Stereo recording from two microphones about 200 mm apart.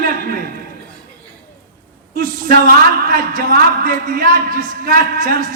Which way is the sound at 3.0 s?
45° right (ahead or behind).